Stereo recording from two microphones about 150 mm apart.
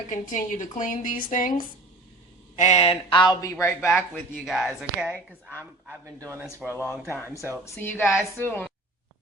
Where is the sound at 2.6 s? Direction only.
50° left (ahead or behind).